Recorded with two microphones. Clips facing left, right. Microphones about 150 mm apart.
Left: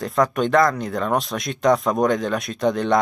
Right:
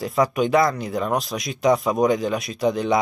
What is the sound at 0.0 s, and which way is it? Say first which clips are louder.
Speech: even; 5° right (ahead or behind).